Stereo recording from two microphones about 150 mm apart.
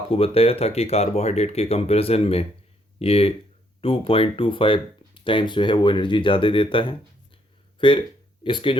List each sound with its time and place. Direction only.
0.1 s speech: 40° left (ahead or behind)